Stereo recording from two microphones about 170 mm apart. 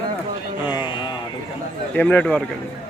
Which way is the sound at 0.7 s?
25° left (ahead or behind).